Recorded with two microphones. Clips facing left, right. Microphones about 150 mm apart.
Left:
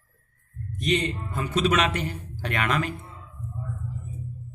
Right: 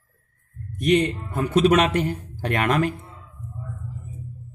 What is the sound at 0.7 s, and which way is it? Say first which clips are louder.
A man's voice: right 6 dB; 60° right (ahead or behind).